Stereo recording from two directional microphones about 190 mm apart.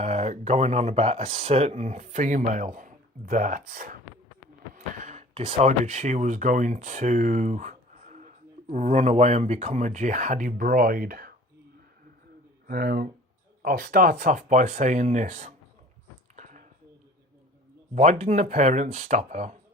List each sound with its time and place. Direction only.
0.0 s speech: 35° right (ahead or behind); by 11.3 s 50° right (ahead or behind)
12.6 s speech: 50° right (ahead or behind)
16.3 s a sound: 40° right (ahead or behind)
17.9 s speech: 35° right (ahead or behind)